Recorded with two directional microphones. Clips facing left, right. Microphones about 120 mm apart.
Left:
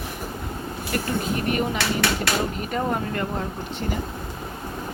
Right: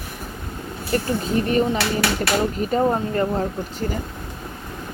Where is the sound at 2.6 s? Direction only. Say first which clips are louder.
Right 6 dB; 35° right (ahead or behind).